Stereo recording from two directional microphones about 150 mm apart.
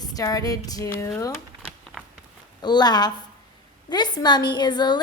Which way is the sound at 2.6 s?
30° left (ahead or behind).